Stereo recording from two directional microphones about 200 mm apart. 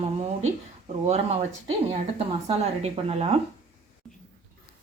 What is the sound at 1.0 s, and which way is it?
Speech, 35° right (ahead or behind).